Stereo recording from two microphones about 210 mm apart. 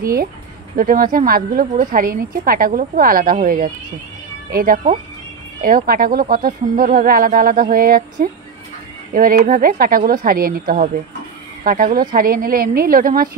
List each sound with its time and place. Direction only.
0.7 s a woman's voice: 40° right (ahead or behind)